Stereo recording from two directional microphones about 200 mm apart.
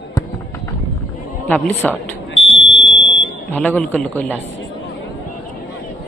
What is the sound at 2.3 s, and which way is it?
Fire alarm, 75° left (ahead or behind).